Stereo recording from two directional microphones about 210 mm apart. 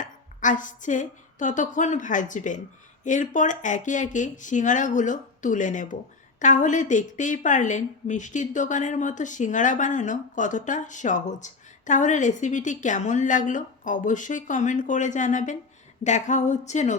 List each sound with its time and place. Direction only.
0.0 s a woman's voice: 35° left (ahead or behind)